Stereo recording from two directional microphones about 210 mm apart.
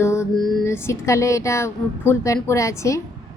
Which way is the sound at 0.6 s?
15° left (ahead or behind).